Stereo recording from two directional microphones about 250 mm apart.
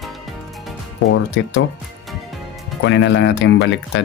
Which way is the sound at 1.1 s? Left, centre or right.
Left.